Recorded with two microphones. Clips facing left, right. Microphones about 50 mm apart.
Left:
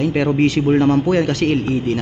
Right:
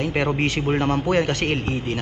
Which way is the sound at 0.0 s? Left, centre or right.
Centre.